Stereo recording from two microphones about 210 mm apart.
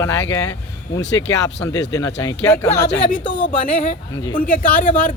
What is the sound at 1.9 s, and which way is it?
Speech, 15° left (ahead or behind).